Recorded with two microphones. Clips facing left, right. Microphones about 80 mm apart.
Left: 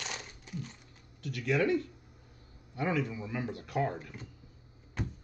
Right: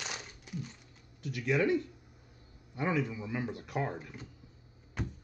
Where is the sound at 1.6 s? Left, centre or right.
Left.